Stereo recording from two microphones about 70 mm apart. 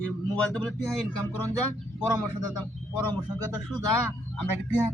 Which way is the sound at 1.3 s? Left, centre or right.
Left.